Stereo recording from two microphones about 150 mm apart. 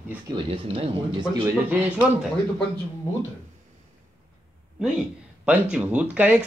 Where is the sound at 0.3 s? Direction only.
35° right (ahead or behind).